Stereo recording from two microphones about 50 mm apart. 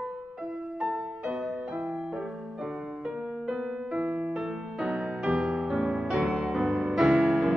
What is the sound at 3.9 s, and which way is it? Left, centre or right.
Music, centre.